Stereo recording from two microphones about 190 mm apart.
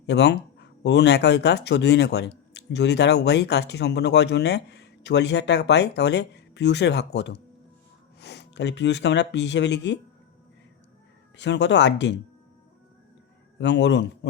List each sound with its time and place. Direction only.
0.0 s speech: 65° left (ahead or behind)
11.3 s speech: 65° left (ahead or behind)
13.6 s speech: 65° left (ahead or behind)